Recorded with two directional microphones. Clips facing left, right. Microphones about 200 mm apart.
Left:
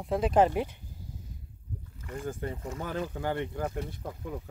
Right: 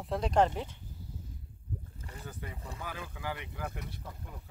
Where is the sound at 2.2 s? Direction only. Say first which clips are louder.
Left 10 dB; 50° left (ahead or behind).